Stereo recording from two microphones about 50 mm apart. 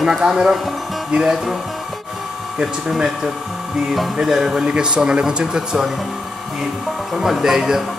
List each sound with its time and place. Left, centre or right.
0.2 s speech: centre
2.6 s speech: centre
4.6 s speech: centre
7.2 s speech: centre